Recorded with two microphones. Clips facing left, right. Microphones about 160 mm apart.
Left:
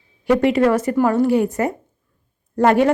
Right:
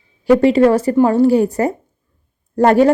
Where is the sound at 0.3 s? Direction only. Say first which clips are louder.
Right 4 dB; 30° right (ahead or behind).